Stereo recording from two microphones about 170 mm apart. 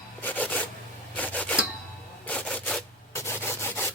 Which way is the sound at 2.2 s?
10° left (ahead or behind).